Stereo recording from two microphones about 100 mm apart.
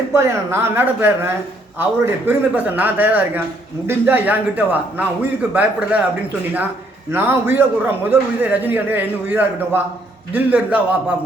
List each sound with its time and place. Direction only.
0.1 s a man's voice: 25° right (ahead or behind)
7.1 s a man's voice: 20° right (ahead or behind)